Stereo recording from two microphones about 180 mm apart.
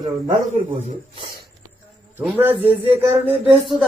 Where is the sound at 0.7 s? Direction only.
35° right (ahead or behind).